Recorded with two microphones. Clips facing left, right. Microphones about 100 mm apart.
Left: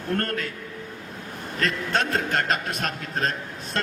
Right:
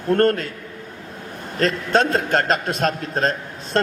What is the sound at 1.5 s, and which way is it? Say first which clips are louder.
A woman's voice: right 7 dB; 35° right (ahead or behind).